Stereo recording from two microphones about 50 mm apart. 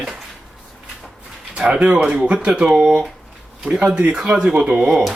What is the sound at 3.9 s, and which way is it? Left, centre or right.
Speech, right.